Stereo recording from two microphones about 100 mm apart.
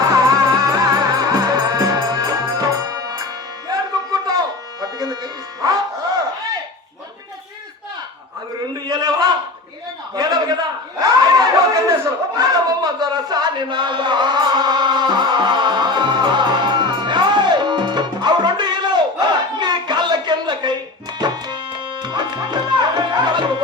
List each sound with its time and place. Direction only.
0.0 s music: 40° right (ahead or behind)
8.7 s a sound: 40° right (ahead or behind)
21.2 s music: 45° right (ahead or behind)